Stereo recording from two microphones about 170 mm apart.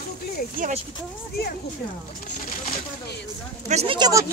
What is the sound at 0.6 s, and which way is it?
Speech, 55° right (ahead or behind).